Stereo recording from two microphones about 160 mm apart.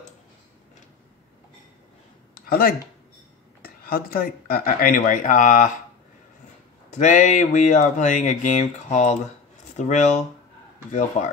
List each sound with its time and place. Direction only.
3.6 s speech: 70° left (ahead or behind); by 5.7 s 55° left (ahead or behind)
7.0 s speech: 50° left (ahead or behind)